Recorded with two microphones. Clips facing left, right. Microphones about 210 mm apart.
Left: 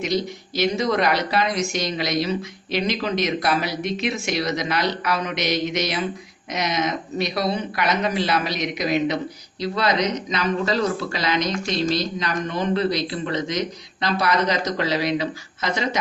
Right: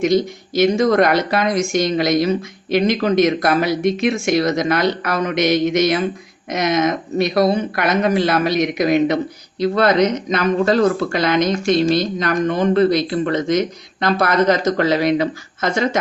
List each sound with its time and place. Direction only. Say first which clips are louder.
0.0 s speech: right 8 dB; 50° right (ahead or behind)